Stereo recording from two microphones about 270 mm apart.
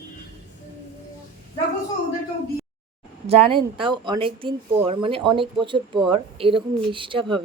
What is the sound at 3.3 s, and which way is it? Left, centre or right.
Speech, centre.